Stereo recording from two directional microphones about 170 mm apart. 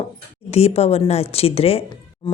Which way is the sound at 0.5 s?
35° left (ahead or behind).